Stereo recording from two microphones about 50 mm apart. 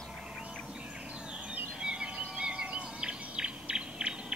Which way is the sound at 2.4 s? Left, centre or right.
Right.